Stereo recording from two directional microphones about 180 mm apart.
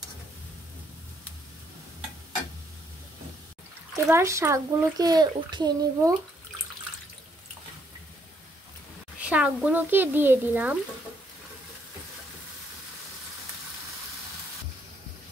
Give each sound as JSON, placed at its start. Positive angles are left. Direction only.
{"t": 3.9, "sound": "a child's voice", "side_deg": -15}
{"t": 9.2, "sound": "speech", "side_deg": -5}